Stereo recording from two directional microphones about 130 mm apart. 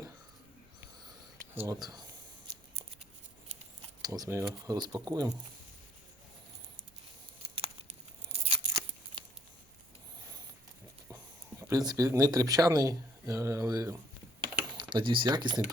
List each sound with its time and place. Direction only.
1.5 s speech: 20° right (ahead or behind)
4.0 s speech: 30° right (ahead or behind)
7.4 s tearing: 45° right (ahead or behind)
11.6 s speech: 30° right (ahead or behind)
14.8 s speech: 35° right (ahead or behind)